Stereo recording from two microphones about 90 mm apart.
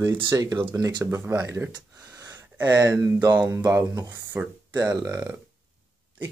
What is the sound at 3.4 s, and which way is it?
Speech, 30° right (ahead or behind).